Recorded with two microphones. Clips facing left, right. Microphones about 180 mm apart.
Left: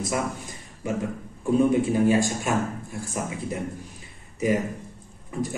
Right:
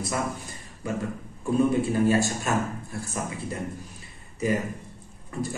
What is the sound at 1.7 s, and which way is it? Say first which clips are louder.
A man's voice: left 2 dB; 15° left (ahead or behind).